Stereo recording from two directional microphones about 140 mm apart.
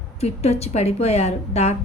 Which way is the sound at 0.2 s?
50° left (ahead or behind).